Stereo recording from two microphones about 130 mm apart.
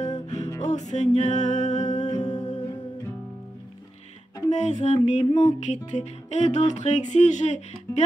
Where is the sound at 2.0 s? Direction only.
30° left (ahead or behind).